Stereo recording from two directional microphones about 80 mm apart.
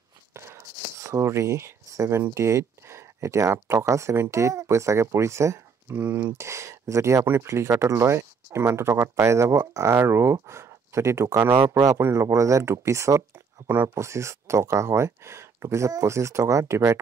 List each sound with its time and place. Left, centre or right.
0.3 s speech: right
5.9 s speech: right